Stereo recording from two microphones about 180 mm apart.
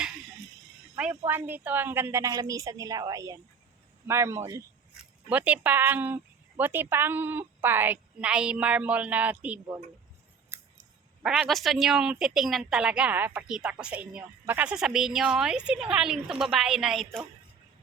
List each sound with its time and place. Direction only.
1.1 s a woman's voice: 15° right (ahead or behind)
10.5 s scissors: 10° right (ahead or behind)
11.2 s a woman's voice: 5° right (ahead or behind)